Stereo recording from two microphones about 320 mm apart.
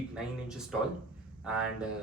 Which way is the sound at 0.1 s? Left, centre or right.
Centre.